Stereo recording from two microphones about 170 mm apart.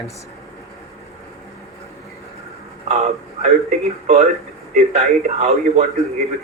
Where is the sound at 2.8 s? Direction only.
40° right (ahead or behind).